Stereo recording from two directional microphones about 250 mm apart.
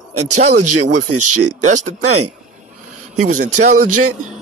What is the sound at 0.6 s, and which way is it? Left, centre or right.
Speech, right.